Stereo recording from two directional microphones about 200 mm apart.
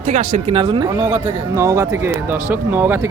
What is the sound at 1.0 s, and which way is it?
Speech, 10° right (ahead or behind).